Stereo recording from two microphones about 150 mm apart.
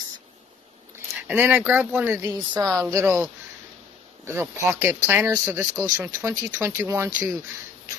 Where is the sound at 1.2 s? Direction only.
10° right (ahead or behind).